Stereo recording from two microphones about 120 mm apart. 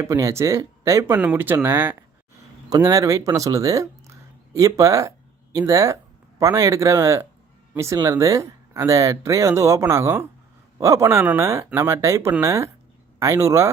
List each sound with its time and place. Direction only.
0.0 s speech: 25° right (ahead or behind)
1.2 s speech: 15° right (ahead or behind)